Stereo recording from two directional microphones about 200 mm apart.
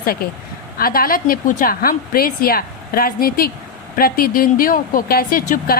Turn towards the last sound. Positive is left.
turn(degrees=45)  # may be behind; listen again after turning